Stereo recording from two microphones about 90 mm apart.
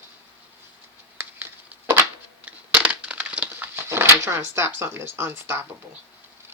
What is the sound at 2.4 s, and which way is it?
Crushing, 15° right (ahead or behind).